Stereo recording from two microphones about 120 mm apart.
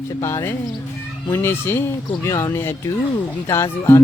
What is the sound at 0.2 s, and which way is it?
Speech, 25° left (ahead or behind).